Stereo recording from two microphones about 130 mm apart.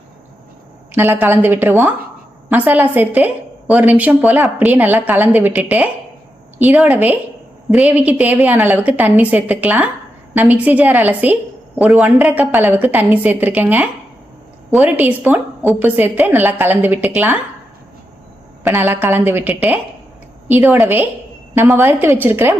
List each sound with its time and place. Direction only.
0.9 s a woman's voice: 15° right (ahead or behind)
18.6 s a woman's voice: 15° right (ahead or behind)